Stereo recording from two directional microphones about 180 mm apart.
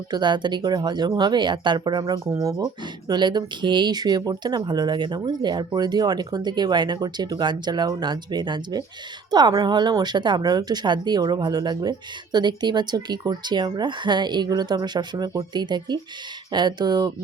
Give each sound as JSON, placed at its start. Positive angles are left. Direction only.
{"t": 0.1, "sound": "a woman's voice", "side_deg": -25}